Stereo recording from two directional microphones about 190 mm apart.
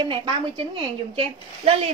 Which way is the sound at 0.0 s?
25° right (ahead or behind).